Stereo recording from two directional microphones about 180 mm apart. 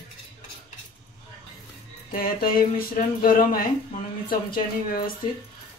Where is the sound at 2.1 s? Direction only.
55° left (ahead or behind).